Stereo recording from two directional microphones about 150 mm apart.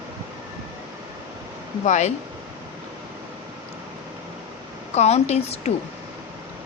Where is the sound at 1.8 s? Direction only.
50° left (ahead or behind).